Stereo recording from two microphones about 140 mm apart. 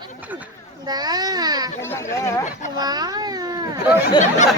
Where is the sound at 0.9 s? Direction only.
30° right (ahead or behind).